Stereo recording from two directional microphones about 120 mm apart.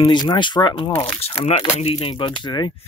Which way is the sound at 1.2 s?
55° left (ahead or behind).